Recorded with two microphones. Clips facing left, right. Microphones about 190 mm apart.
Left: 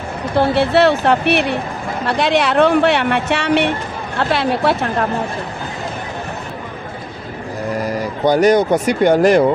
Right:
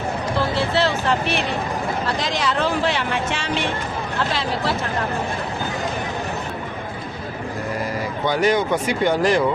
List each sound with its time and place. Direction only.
0.3 s speech: 65° left (ahead or behind)
8.2 s speech: 40° left (ahead or behind)